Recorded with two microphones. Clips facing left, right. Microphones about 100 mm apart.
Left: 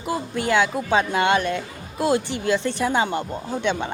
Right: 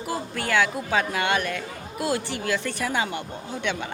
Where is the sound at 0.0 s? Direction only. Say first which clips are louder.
Left 4 dB; 20° left (ahead or behind).